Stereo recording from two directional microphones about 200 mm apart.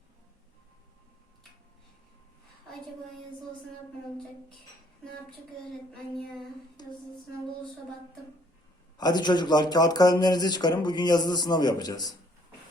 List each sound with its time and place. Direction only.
6.8 s speech: 20° left (ahead or behind)
9.0 s speech: 20° left (ahead or behind)